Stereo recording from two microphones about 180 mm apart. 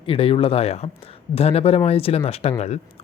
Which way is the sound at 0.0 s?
30° left (ahead or behind).